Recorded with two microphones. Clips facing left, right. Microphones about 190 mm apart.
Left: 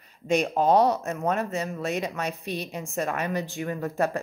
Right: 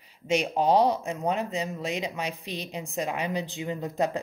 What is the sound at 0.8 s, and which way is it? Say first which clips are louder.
Speech: left 1 dB; 15° right (ahead or behind).